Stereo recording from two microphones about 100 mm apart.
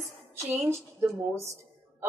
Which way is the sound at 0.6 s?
25° right (ahead or behind).